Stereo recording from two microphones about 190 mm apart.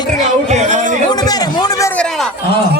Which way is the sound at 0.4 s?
35° right (ahead or behind).